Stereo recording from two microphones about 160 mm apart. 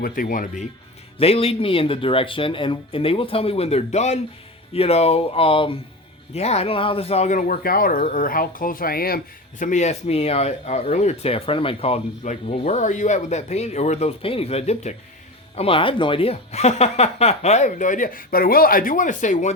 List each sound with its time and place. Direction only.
0.0 s speech: 60° left (ahead or behind)
1.2 s speech: 40° left (ahead or behind)